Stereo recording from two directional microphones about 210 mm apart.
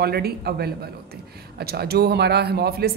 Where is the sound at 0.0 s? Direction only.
50° right (ahead or behind).